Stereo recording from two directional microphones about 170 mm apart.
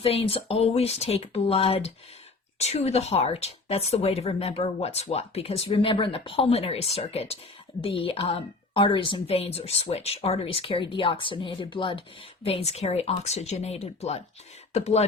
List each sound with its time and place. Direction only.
0.0 s speech: 35° left (ahead or behind)